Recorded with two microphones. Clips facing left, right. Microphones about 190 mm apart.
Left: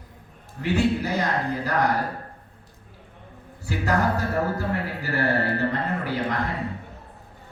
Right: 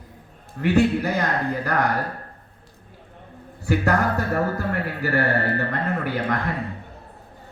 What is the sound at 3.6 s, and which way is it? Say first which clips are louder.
A man's voice: right 3 dB; 60° right (ahead or behind).